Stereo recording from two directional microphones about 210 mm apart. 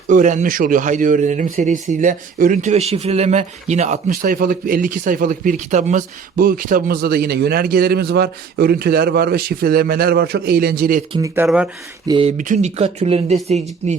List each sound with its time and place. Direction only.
0.1 s speech: 40° right (ahead or behind)
11.1 s speech: 15° right (ahead or behind)
11.4 s speech: 5° right (ahead or behind)
12.0 s speech: 25° right (ahead or behind)
12.4 s speech: 35° right (ahead or behind)